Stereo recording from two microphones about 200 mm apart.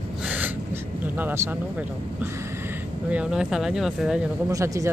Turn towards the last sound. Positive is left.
turn(degrees=-15)  # may be behind; listen again after turning